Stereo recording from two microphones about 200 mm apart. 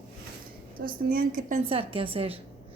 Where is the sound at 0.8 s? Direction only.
45° right (ahead or behind).